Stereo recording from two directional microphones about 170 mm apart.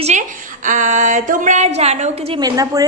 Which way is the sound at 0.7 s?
50° right (ahead or behind).